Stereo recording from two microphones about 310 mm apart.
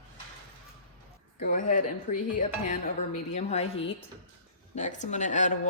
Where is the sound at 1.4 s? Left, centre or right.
Left.